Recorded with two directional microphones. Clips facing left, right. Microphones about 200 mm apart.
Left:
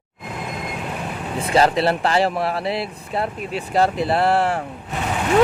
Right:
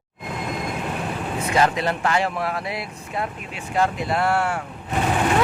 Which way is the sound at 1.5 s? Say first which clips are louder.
Left 4 dB; 35° left (ahead or behind).